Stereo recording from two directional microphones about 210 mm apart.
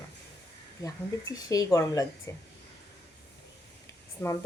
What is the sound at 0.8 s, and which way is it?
Speech, 15° left (ahead or behind).